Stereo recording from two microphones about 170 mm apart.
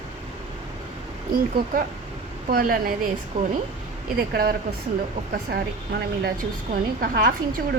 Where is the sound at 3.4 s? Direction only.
30° right (ahead or behind).